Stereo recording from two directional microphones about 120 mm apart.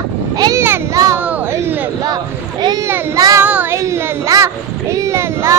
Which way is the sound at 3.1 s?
30° right (ahead or behind).